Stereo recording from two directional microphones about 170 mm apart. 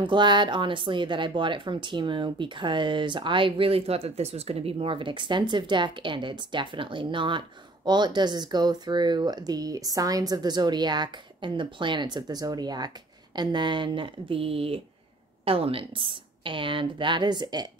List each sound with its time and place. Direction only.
0.0 s a woman's voice: 25° right (ahead or behind)